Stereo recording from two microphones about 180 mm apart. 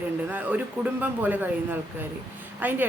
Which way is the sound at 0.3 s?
10° right (ahead or behind).